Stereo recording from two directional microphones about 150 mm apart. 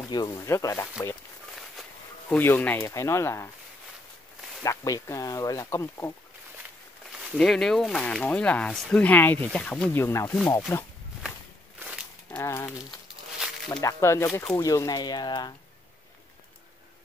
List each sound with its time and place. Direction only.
0.1 s speech: 25° left (ahead or behind)
1.5 s a sound: 5° left (ahead or behind)
4.6 s speech: 20° left (ahead or behind)
7.1 s speech: centre (ahead or behind); by 10.8 s 15° left (ahead or behind)
12.3 s speech: 15° left (ahead or behind)